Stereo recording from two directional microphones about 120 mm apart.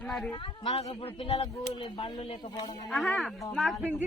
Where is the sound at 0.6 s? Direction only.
60° left (ahead or behind).